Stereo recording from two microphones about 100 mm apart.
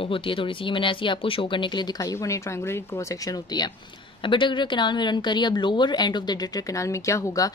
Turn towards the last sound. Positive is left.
turn(degrees=35)  # may be behind; listen again after turning